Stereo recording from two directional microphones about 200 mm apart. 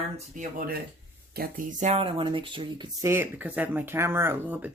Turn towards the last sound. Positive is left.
turn(degrees=-10)  # may be behind; listen again after turning